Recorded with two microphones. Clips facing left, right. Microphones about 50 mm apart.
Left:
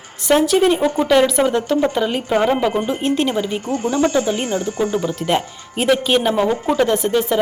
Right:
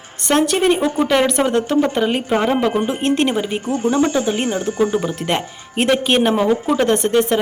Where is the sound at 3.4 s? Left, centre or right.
Right.